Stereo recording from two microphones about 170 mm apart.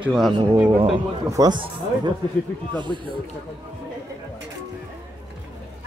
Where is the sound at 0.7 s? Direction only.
30° right (ahead or behind).